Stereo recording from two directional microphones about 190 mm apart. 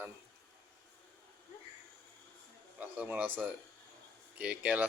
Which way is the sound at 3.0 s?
10° right (ahead or behind).